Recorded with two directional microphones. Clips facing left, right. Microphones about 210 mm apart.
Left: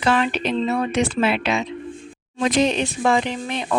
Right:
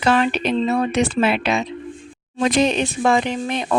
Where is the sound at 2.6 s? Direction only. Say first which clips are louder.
Right 1 dB; 55° right (ahead or behind).